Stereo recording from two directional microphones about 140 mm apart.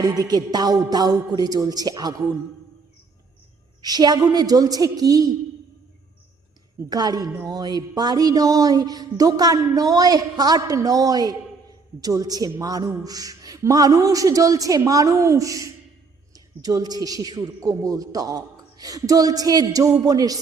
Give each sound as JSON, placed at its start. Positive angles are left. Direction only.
{"t": 0.0, "sound": "a man's voice", "side_deg": -25}
{"t": 3.8, "sound": "a woman's voice", "side_deg": -30}
{"t": 6.7, "sound": "a man's voice", "side_deg": -25}